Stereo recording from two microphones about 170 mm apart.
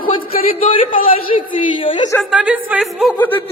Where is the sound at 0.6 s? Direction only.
30° left (ahead or behind).